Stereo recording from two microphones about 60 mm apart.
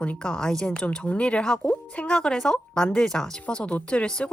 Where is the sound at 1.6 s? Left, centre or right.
Left.